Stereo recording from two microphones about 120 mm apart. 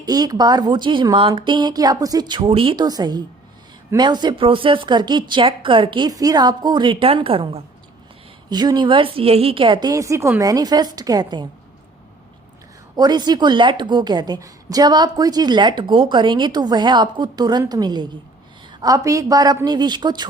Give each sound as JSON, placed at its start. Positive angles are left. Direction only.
{"t": 0.0, "sound": "a woman's voice", "side_deg": -30}
{"t": 2.4, "sound": "a woman's voice", "side_deg": -50}
{"t": 2.8, "sound": "a woman's voice", "side_deg": -35}
{"t": 8.4, "sound": "a woman's voice", "side_deg": -35}
{"t": 9.9, "sound": "a woman's voice", "side_deg": -25}
{"t": 13.0, "sound": "a woman's voice", "side_deg": -35}